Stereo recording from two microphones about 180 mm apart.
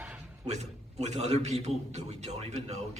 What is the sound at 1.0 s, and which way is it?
A man's voice, 35° right (ahead or behind).